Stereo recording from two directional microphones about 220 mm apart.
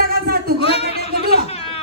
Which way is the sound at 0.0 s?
45° right (ahead or behind).